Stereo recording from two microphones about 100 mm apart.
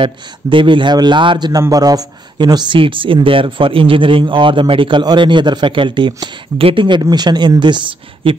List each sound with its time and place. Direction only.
0.0 s speech: 55° right (ahead or behind)
1.5 s a man's voice: 35° right (ahead or behind)
2.8 s speech: 60° right (ahead or behind)